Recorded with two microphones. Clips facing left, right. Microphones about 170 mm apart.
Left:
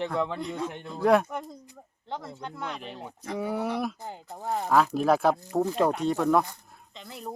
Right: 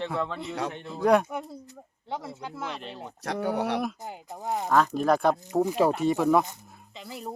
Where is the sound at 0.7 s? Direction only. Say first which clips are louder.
Even; centre (ahead or behind).